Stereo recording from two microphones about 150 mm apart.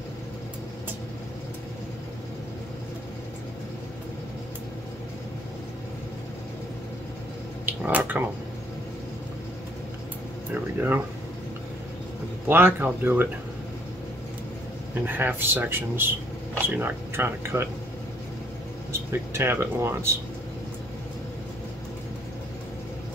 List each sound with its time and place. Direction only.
7.6 s speech: 10° right (ahead or behind)
10.5 s speech: 10° right (ahead or behind)
12.4 s speech: 15° right (ahead or behind)
15.0 s speech: 15° right (ahead or behind)
18.9 s speech: 15° right (ahead or behind)